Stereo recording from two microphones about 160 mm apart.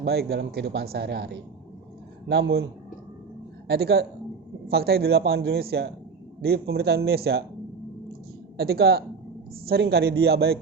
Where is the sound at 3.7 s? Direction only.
85° right.